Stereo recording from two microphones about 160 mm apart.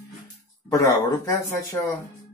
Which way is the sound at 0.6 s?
20° left (ahead or behind).